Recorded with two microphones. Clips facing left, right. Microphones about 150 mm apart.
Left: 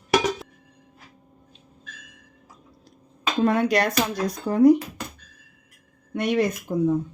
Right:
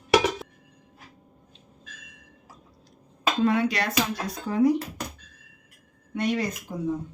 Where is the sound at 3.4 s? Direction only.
50° left (ahead or behind).